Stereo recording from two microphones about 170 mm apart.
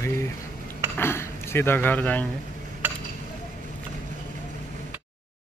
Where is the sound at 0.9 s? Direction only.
15° left (ahead or behind).